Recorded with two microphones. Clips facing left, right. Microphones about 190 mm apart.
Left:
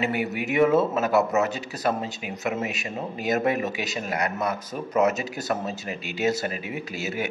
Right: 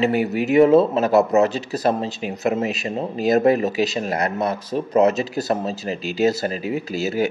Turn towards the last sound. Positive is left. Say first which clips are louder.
# right 8 dB
turn(degrees=-35)  # may be behind; listen again after turning